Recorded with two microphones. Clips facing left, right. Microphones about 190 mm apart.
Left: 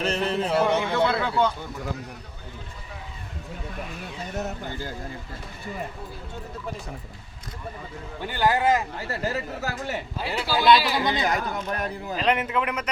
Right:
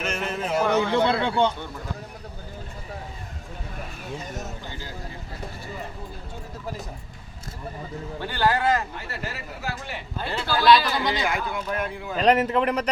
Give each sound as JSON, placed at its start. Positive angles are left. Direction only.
{"t": 0.0, "sound": "a sound", "side_deg": 35}
{"t": 0.8, "sound": "a man's voice", "side_deg": -30}
{"t": 4.4, "sound": "speech", "side_deg": 60}
{"t": 8.2, "sound": "speech", "side_deg": 15}
{"t": 9.0, "sound": "speech", "side_deg": 40}
{"t": 10.2, "sound": "speech", "side_deg": 10}
{"t": 11.2, "sound": "speech", "side_deg": 40}
{"t": 12.1, "sound": "a man's voice", "side_deg": -40}